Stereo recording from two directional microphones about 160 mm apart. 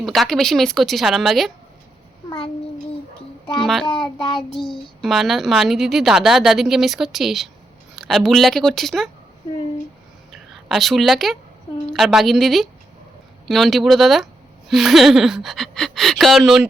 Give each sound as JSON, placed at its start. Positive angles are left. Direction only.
{"t": 0.0, "sound": "speech", "side_deg": 0}
{"t": 3.6, "sound": "speech", "side_deg": 0}
{"t": 3.9, "sound": "child singing", "side_deg": 30}
{"t": 5.0, "sound": "speech", "side_deg": 0}
{"t": 10.3, "sound": "speech", "side_deg": 0}